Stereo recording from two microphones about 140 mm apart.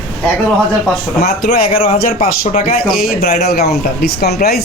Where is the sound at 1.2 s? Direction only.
90° left.